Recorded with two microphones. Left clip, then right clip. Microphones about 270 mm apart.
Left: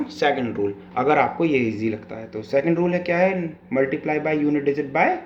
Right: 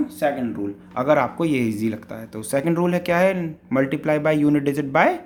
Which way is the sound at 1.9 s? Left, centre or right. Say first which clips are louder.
Left 2 dB; right.